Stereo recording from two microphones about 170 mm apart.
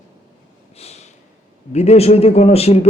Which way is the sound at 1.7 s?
40° left (ahead or behind).